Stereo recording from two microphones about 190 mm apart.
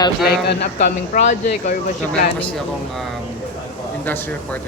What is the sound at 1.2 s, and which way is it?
Speech, 40° left (ahead or behind).